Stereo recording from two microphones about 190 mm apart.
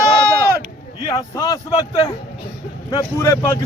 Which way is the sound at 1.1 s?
15° left (ahead or behind).